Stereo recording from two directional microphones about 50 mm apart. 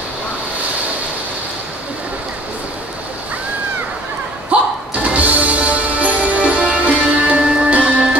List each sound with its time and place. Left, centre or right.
4.5 s music: right